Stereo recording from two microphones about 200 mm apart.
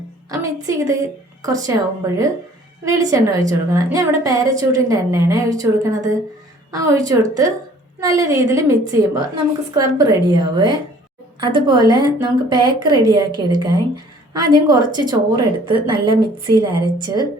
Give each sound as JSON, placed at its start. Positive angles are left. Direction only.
{"t": 0.3, "sound": "a woman's voice", "side_deg": -15}